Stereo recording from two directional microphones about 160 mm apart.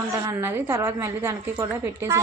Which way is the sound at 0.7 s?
20° right (ahead or behind).